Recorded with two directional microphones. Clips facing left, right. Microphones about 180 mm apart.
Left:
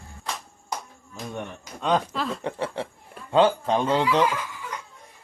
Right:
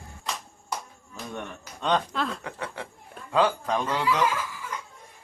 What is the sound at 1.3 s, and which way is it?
Speech, 15° left (ahead or behind).